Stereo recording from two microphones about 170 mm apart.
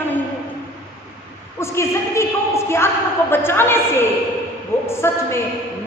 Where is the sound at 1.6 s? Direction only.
15° left (ahead or behind).